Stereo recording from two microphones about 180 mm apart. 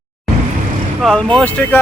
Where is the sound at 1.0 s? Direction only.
5° left (ahead or behind).